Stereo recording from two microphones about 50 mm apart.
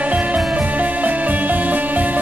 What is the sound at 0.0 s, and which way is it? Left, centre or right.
Music, right.